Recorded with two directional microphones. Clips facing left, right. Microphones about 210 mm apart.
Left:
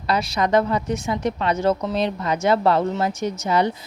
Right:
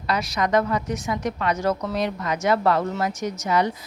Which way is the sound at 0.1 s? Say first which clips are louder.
Left 2 dB; 30° left (ahead or behind).